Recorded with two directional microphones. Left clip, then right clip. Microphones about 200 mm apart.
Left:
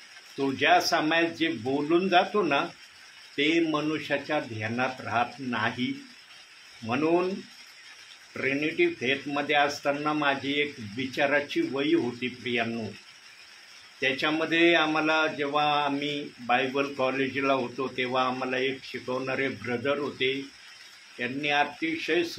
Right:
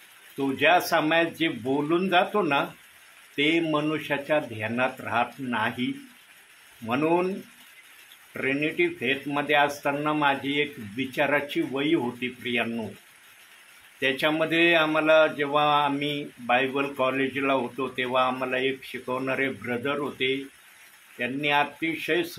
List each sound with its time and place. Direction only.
0.6 s mantra: 25° right (ahead or behind)
6.9 s mantra: 20° right (ahead or behind)
8.3 s mantra: 20° right (ahead or behind)
13.9 s mantra: 20° right (ahead or behind)